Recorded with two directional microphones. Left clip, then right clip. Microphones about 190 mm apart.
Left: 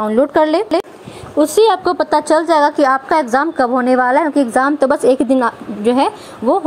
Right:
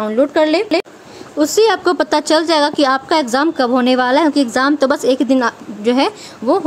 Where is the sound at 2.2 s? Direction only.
5° right (ahead or behind).